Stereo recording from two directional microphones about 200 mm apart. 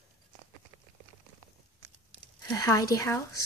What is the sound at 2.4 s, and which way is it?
Speech, 15° left (ahead or behind).